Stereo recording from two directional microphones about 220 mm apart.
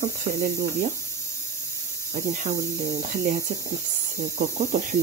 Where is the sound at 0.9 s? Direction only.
15° left (ahead or behind).